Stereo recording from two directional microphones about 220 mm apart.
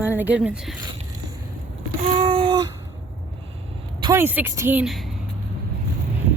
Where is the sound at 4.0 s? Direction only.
15° right (ahead or behind).